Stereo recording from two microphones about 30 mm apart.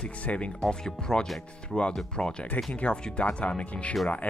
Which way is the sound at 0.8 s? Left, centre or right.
Centre.